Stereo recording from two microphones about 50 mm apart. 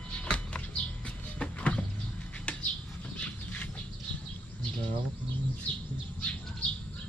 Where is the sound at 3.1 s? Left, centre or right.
Left.